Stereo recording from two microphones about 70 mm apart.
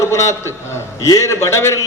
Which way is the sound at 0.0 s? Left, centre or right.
Left.